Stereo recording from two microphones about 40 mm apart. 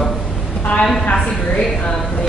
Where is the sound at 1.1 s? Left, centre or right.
Left.